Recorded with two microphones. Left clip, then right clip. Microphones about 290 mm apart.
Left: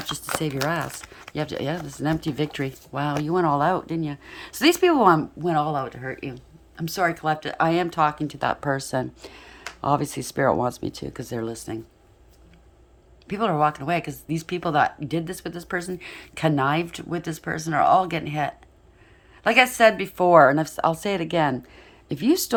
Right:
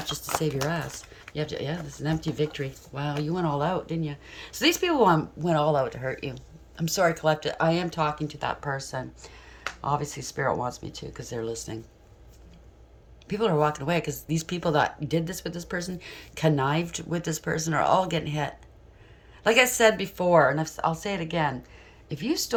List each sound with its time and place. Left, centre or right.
0.0 s speech: centre
13.2 s speech: centre